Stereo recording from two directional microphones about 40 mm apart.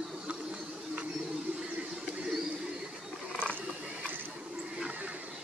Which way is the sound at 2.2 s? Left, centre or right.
Centre.